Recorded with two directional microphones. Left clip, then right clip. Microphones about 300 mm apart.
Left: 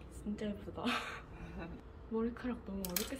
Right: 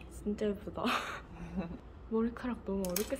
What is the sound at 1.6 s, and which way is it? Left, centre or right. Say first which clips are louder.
Speech: right 6 dB; right.